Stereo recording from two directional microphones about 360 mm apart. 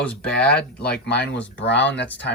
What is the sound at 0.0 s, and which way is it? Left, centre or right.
Speech, centre.